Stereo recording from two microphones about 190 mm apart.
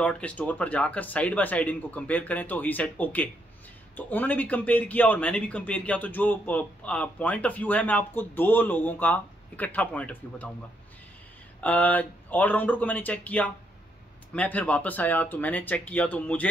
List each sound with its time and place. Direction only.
0.0 s speech: 5° left (ahead or behind)
11.6 s speech: 10° left (ahead or behind)